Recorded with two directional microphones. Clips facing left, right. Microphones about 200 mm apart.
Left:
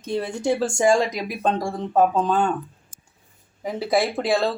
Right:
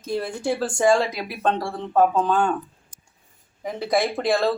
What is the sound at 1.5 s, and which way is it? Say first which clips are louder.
Speech: left 2 dB; 15° left (ahead or behind).